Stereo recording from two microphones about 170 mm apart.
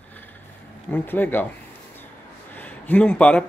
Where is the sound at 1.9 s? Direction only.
10° left (ahead or behind).